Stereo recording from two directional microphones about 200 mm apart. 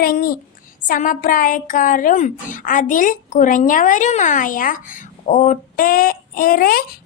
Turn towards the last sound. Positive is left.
turn(degrees=50)  # may be behind; listen again after turning